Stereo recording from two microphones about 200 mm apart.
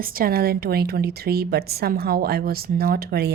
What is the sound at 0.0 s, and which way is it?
A woman's voice, 45° right (ahead or behind).